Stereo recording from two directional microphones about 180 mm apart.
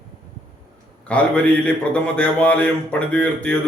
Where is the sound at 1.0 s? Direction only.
5° left (ahead or behind).